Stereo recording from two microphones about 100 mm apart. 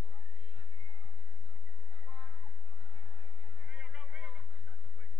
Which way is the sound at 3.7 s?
15° right (ahead or behind).